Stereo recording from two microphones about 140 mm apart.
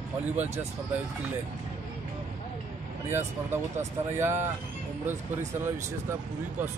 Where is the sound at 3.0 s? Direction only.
15° right (ahead or behind).